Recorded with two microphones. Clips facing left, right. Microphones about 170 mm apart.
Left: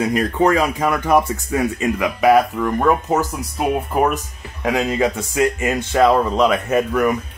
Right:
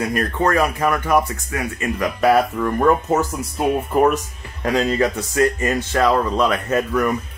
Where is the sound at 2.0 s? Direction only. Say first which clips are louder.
Left 1 dB; 10° left (ahead or behind).